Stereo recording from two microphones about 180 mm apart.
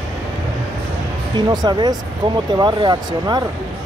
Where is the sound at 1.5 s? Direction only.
25° right (ahead or behind).